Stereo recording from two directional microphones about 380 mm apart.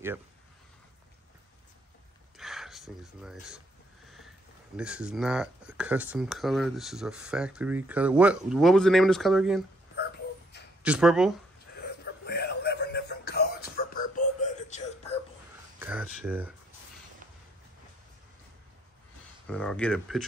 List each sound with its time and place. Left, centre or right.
2.3 s a sound: centre
4.7 s speech: centre
10.8 s speech: centre
12.0 s music: left
15.8 s speech: centre
19.4 s speech: centre